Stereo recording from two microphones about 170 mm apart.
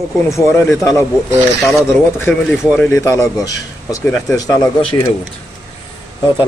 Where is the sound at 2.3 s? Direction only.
Centre (ahead or behind).